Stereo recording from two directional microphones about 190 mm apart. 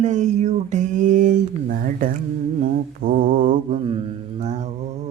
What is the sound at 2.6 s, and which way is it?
Mantra, 45° right (ahead or behind).